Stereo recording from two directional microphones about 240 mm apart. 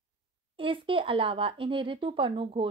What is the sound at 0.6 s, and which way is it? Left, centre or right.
Speech, right.